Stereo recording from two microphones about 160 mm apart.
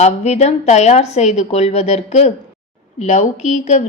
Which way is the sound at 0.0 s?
45° left (ahead or behind).